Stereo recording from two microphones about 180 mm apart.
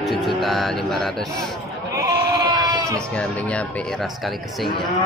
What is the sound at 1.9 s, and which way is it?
Sheep, 20° right (ahead or behind).